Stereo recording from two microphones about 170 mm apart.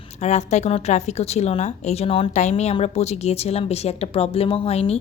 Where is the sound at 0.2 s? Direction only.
40° left (ahead or behind).